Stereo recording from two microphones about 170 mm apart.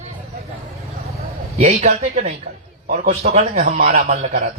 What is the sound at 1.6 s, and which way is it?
A man's voice, 45° right (ahead or behind).